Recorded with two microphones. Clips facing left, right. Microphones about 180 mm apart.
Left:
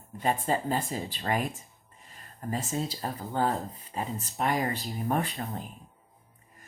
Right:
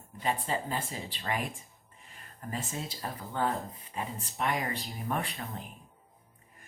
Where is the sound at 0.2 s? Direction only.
45° left (ahead or behind).